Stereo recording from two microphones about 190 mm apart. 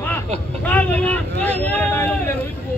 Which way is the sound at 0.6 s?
10° left (ahead or behind).